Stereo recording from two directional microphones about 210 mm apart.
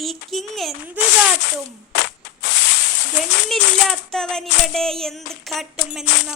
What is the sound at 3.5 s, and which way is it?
Music, centre (ahead or behind).